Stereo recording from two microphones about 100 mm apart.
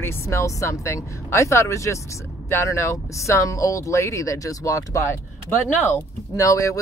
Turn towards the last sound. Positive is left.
turn(degrees=30)  # may be behind; listen again after turning